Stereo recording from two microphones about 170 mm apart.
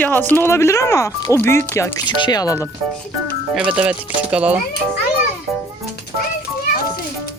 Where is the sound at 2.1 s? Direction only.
25° left (ahead or behind).